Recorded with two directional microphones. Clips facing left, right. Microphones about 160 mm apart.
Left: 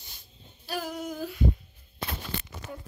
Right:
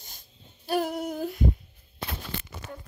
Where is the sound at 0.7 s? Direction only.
60° right (ahead or behind).